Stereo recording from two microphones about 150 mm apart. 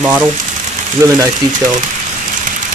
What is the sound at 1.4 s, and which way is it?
Speech, 25° right (ahead or behind).